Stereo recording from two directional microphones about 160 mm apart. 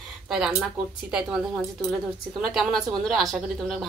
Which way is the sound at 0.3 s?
5° right (ahead or behind).